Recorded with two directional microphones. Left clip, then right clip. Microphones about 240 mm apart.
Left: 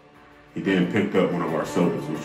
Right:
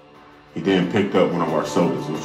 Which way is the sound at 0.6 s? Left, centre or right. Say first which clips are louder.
Right 3 dB; centre.